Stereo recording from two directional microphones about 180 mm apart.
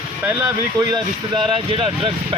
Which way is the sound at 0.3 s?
20° right (ahead or behind).